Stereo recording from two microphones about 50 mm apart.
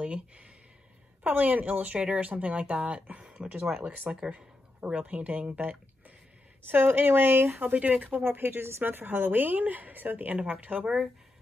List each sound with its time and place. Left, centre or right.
0.0 s speech: right
1.2 s a woman's voice: right
3.3 s speech: centre
3.8 s speech: right
6.7 s speech: right
8.2 s a woman's voice: right; by 11.1 s centre